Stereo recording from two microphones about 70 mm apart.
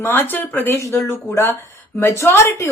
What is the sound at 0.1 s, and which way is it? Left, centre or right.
Speech, left.